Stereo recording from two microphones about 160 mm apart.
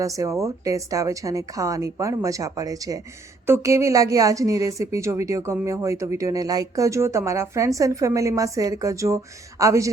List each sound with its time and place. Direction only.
0.0 s a woman's voice: 20° right (ahead or behind)